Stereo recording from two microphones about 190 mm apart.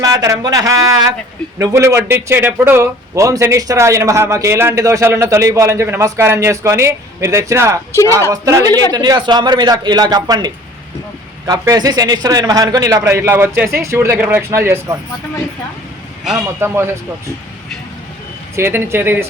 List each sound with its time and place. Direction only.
0.0 s a man's voice: 15° right (ahead or behind)
16.6 s speech: 15° right (ahead or behind)
18.5 s speech: 15° right (ahead or behind)